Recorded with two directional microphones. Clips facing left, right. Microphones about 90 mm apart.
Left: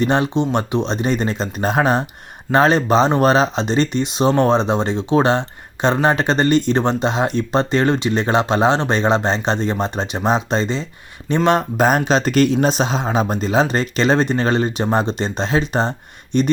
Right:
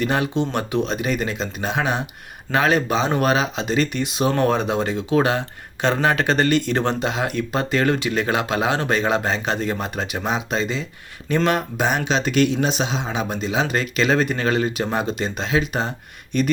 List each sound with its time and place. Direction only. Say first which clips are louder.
0.0 s speech: left 4 dB; 25° left (ahead or behind)
11.8 s speech: left 5 dB; 45° left (ahead or behind); by 16.5 s 25° left (ahead or behind)